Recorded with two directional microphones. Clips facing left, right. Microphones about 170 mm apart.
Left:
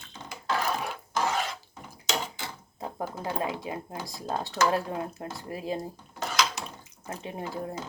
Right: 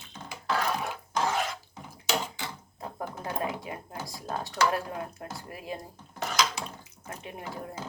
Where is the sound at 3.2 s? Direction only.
25° left (ahead or behind).